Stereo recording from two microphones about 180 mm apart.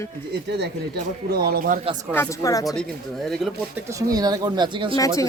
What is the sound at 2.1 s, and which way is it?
Speech, 15° left (ahead or behind).